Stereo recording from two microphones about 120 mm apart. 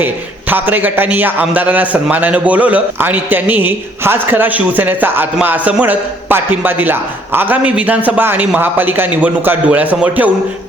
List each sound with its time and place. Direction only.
0.5 s a man's voice: 15° right (ahead or behind)